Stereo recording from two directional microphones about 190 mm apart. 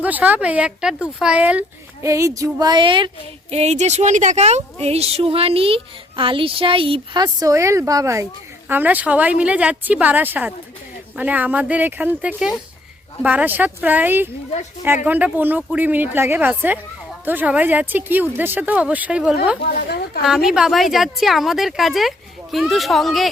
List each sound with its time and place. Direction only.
0.0 s a woman's voice: 10° right (ahead or behind)
19.9 s a woman's voice: 55° left (ahead or behind)
20.2 s a woman's voice: centre (ahead or behind)